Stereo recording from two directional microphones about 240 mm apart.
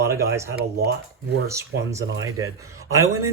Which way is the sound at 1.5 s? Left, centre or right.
Centre.